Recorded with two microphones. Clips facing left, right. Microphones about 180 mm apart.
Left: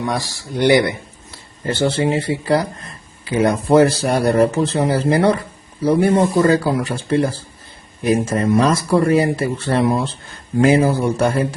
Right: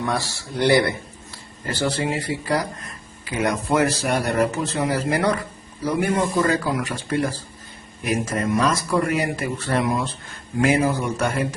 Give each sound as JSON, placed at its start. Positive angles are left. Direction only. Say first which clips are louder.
{"t": 0.0, "sound": "a man's voice", "louder": "left 2 dB", "side_deg": 15}